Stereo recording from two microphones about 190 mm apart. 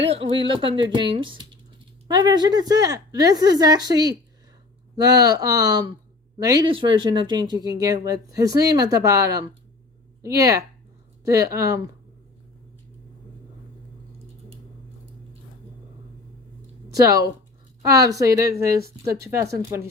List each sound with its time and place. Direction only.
0.0 s speech: 30° right (ahead or behind)
16.9 s speech: 15° right (ahead or behind)